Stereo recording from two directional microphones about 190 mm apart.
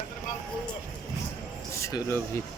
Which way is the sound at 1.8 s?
15° left (ahead or behind).